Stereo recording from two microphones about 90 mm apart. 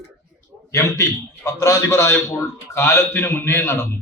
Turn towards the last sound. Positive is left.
turn(degrees=30)  # may be behind; listen again after turning